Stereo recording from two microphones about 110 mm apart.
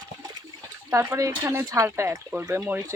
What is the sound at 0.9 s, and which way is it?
Speech, 25° right (ahead or behind).